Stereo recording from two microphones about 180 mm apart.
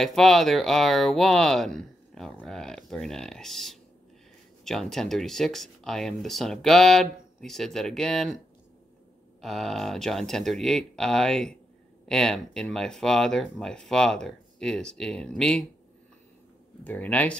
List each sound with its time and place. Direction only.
0.0 s speech: centre (ahead or behind)
9.4 s speech: centre (ahead or behind)
16.8 s speech: 10° left (ahead or behind)